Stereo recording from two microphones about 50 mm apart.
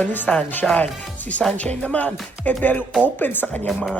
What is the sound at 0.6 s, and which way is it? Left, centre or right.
Speech, centre.